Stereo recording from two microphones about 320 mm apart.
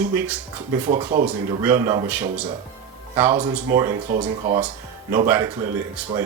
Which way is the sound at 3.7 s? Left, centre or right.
Centre.